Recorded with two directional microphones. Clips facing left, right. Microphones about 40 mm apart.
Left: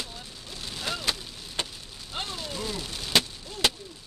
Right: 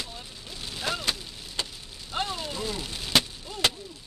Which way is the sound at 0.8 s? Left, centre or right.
Centre.